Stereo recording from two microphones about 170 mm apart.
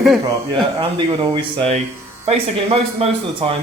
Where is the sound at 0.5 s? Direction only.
25° right (ahead or behind).